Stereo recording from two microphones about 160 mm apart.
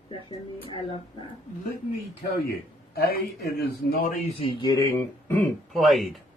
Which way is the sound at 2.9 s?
75° left (ahead or behind).